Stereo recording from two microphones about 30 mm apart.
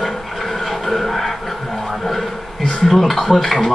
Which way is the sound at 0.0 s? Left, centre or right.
Centre.